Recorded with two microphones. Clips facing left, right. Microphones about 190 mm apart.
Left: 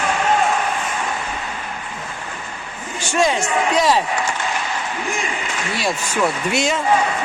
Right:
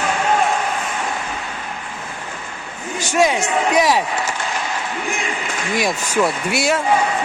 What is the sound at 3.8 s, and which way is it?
Speech, 10° right (ahead or behind).